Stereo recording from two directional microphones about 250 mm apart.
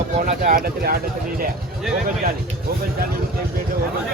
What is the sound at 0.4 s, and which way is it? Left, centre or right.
Speech, right.